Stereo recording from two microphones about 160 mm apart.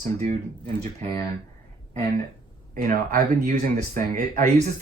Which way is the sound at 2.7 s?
65° right (ahead or behind).